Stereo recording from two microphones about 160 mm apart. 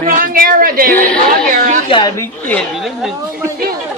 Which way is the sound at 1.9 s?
30° left (ahead or behind).